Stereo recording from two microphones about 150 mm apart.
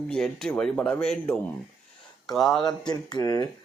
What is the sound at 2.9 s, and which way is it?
Speech, 25° left (ahead or behind).